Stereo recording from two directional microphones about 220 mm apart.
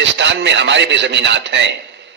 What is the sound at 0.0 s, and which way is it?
A man's voice, 55° right (ahead or behind).